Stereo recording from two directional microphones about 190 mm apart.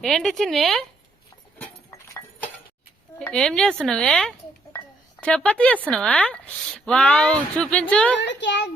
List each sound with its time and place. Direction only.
0.0 s speech: centre (ahead or behind)
1.9 s goat: 15° left (ahead or behind)
3.2 s speech: 5° left (ahead or behind)
8.2 s a child's voice: 70° left (ahead or behind)